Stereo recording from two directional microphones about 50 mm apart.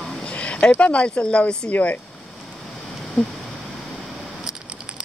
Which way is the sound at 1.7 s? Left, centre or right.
Left.